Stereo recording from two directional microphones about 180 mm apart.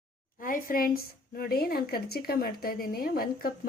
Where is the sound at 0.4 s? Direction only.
50° left (ahead or behind).